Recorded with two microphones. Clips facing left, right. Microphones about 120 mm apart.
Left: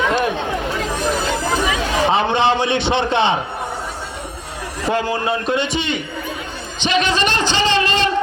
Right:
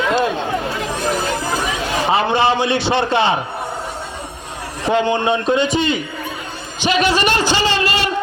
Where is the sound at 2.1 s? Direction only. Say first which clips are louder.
Right 2 dB; 5° right (ahead or behind).